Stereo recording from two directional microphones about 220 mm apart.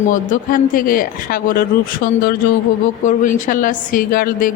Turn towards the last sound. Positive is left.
turn(degrees=40)  # may be behind; listen again after turning